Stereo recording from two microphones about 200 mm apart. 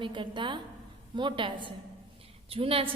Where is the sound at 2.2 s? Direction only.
30° right (ahead or behind).